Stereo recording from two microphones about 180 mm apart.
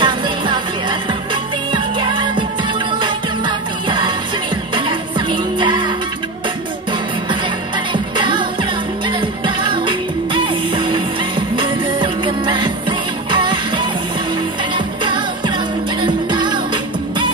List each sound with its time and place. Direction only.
0.0 s music: 25° right (ahead or behind)
7.9 s music: 25° right (ahead or behind)
9.6 s music: 25° right (ahead or behind)
16.0 s music: 25° right (ahead or behind)